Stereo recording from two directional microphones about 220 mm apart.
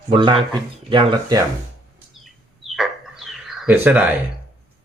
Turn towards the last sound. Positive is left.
turn(degrees=-10)  # may be behind; listen again after turning